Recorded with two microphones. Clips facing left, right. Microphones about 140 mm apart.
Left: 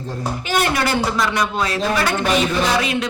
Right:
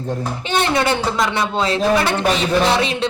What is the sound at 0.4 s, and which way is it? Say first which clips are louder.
A man's voice: right 2 dB; 30° right (ahead or behind).